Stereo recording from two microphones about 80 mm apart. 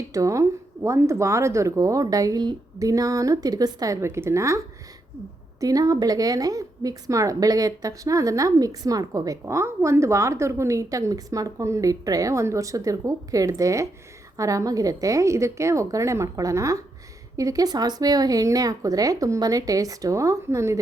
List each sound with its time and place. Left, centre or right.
0.1 s a woman's voice: right
2.7 s a woman's voice: right
4.0 s a woman's voice: right
5.5 s a woman's voice: right